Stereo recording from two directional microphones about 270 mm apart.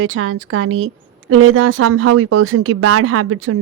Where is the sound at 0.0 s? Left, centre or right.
Right.